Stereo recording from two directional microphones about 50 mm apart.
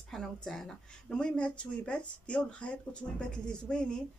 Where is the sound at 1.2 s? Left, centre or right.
Left.